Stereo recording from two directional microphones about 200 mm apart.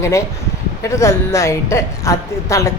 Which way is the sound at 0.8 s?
15° left (ahead or behind).